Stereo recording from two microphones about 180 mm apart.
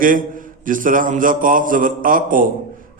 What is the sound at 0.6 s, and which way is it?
A man's voice, 50° right (ahead or behind).